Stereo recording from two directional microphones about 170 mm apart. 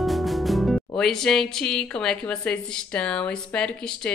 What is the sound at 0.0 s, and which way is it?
Speech, centre (ahead or behind).